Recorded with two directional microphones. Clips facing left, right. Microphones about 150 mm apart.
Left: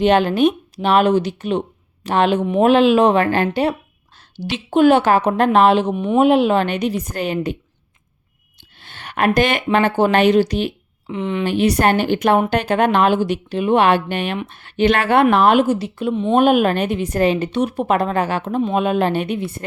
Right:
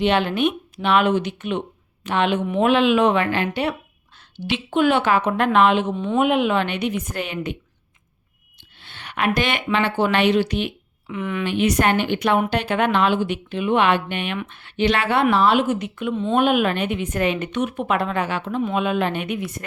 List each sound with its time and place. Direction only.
0.0 s a woman's voice: 45° left (ahead or behind)
5.9 s speech: 15° left (ahead or behind)
6.1 s a woman's voice: 35° left (ahead or behind)
8.8 s a sound: 45° left (ahead or behind)
9.7 s a woman's voice: 45° left (ahead or behind); by 11.4 s 25° left (ahead or behind)
11.4 s a woman's voice: 35° left (ahead or behind); by 15.6 s 55° left (ahead or behind)
15.6 s a woman's voice: 35° left (ahead or behind)